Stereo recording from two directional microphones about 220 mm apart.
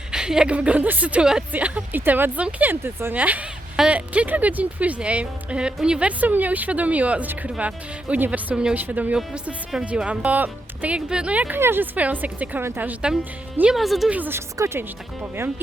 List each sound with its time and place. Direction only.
0.1 s a woman's voice: 5° right (ahead or behind)